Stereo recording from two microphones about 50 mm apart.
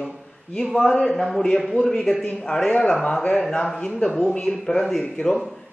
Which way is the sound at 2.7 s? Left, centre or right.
Centre.